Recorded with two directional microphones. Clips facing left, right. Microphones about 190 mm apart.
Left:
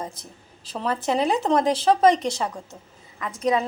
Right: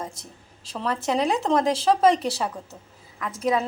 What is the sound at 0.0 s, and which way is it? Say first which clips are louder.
A woman's voice: left 1 dB; centre (ahead or behind).